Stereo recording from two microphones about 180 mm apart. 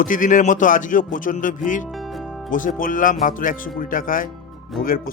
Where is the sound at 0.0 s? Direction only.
45° left (ahead or behind).